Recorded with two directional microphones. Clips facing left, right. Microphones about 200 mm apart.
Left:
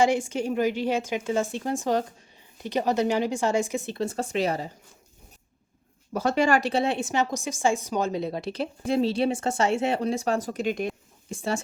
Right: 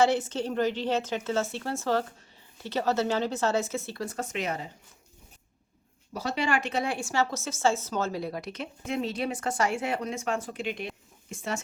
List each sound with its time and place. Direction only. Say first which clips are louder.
0.0 s speech: left 2 dB; 10° left (ahead or behind); by 4.7 s 35° left (ahead or behind)
6.1 s a woman's voice: left 6 dB; 50° left (ahead or behind); by 11.6 s 30° left (ahead or behind)